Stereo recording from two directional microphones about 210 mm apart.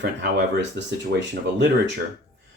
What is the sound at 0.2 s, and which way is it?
Speech, 55° right (ahead or behind).